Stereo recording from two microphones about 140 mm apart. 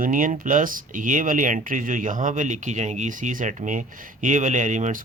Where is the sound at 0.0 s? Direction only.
70° right (ahead or behind).